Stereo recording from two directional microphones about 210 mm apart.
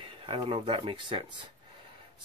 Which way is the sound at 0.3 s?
25° right (ahead or behind).